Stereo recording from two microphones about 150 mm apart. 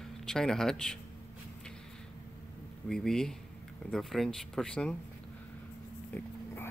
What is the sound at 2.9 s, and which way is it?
Speech, 5° left (ahead or behind).